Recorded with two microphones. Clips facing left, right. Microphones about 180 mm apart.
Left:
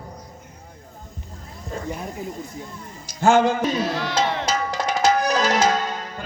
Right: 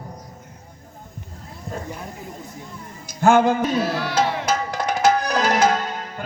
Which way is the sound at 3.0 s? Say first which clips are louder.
Right 1 dB; 55° right (ahead or behind).